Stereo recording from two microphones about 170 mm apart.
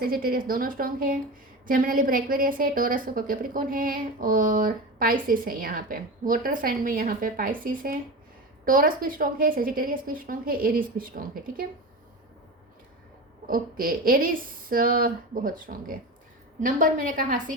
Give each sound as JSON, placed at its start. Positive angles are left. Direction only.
{"t": 0.0, "sound": "a woman's voice", "side_deg": -60}
{"t": 13.5, "sound": "a woman's voice", "side_deg": -55}